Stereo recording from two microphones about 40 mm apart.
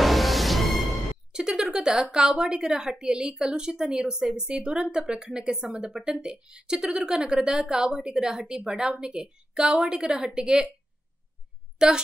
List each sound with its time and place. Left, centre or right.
0.0 s music: centre
1.3 s a woman's voice: centre
11.8 s a woman's voice: centre